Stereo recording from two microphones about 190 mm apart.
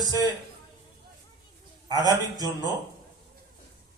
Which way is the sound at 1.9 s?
20° right (ahead or behind).